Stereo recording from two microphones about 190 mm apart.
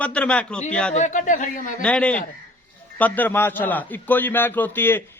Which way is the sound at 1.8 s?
5° left (ahead or behind).